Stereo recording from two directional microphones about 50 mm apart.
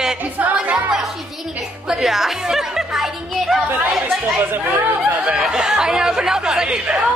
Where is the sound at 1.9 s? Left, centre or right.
Centre.